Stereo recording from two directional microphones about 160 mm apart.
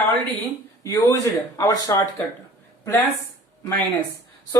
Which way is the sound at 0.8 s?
20° left (ahead or behind).